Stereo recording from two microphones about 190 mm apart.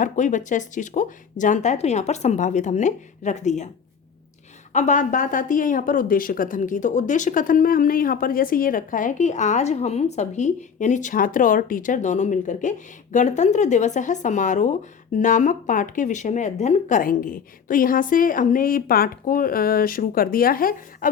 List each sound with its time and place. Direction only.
0.0 s speech: 40° left (ahead or behind)
4.7 s speech: 40° left (ahead or behind)